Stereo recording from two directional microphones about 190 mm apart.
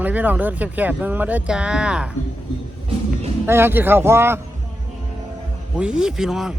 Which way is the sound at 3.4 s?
10° right (ahead or behind).